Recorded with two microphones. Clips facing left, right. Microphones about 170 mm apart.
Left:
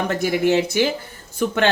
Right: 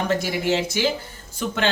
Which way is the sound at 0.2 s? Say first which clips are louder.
Left 5 dB; 55° left (ahead or behind).